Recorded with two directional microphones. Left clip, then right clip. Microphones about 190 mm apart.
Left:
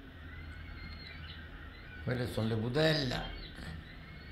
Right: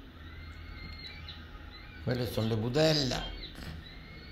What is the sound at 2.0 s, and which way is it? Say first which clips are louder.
A man's voice: right 3 dB; 20° right (ahead or behind).